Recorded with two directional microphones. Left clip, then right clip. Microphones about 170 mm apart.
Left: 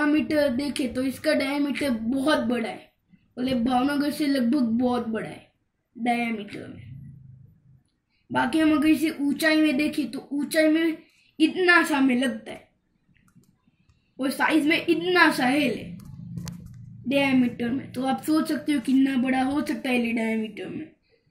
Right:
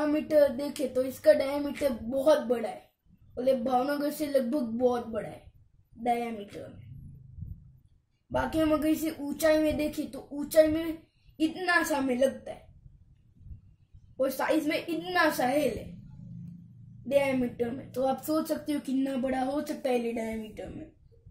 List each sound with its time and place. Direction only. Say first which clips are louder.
0.1 s a woman's voice: left 1 dB; 30° right (ahead or behind)
8.5 s a woman's voice: left 5 dB; 30° right (ahead or behind)
14.1 s a woman's voice: left 4 dB; 25° right (ahead or behind)
17.1 s a woman's voice: left 3 dB; 30° right (ahead or behind); by 20.6 s 15° right (ahead or behind)